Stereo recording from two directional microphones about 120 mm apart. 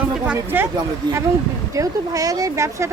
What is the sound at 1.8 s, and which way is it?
Speech, 30° right (ahead or behind).